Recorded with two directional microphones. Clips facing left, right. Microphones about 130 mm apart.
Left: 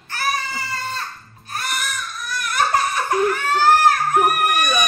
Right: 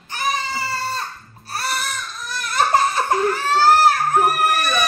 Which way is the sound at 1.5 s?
35° right (ahead or behind).